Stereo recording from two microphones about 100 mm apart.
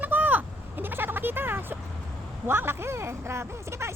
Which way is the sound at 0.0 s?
15° right (ahead or behind).